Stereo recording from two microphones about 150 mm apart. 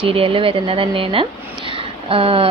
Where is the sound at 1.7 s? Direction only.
35° right (ahead or behind).